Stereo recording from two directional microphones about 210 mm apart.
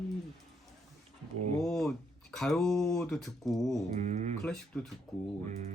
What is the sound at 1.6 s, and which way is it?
Speech, centre (ahead or behind).